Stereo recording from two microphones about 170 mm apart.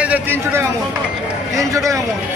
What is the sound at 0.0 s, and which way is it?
Speech, 10° right (ahead or behind).